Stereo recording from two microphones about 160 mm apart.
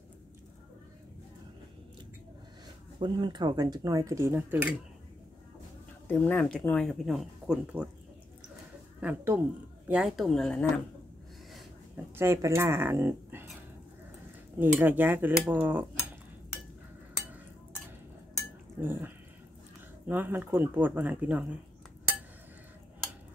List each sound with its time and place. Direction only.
3.0 s speech: 25° right (ahead or behind); by 4.7 s 10° right (ahead or behind)
6.0 s speech: 10° left (ahead or behind); by 7.9 s 5° right (ahead or behind)
9.0 s speech: 15° right (ahead or behind)
9.8 s speech: 5° right (ahead or behind)
12.2 s speech: 15° right (ahead or behind)
14.6 s speech: 10° right (ahead or behind)
18.8 s speech: 15° right (ahead or behind)